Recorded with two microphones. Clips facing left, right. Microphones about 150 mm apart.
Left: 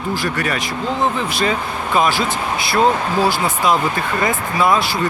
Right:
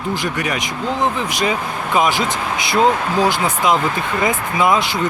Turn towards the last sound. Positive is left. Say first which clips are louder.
# even
turn(degrees=-20)  # may be behind; listen again after turning